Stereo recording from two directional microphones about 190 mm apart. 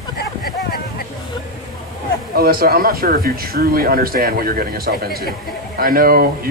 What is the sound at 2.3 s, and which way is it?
Speech, 50° right (ahead or behind).